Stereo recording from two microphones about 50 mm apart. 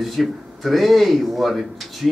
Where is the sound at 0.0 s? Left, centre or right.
Centre.